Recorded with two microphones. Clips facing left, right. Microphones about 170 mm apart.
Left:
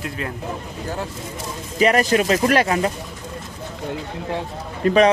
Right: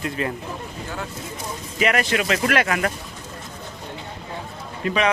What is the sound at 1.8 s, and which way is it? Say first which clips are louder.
Speech: left 5 dB; 35° left (ahead or behind).